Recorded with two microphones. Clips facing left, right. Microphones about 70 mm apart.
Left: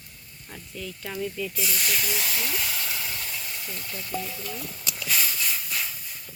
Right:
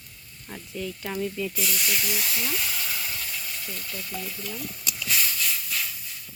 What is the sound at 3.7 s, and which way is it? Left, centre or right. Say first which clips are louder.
Speech: left 6 dB; centre.